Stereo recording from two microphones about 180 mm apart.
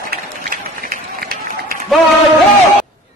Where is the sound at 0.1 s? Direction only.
55° right (ahead or behind).